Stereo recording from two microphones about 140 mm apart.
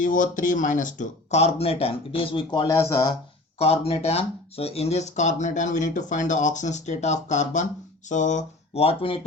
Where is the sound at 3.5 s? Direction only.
45° left (ahead or behind).